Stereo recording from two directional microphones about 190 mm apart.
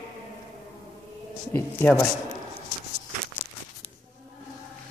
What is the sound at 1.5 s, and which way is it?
Speech, 10° left (ahead or behind).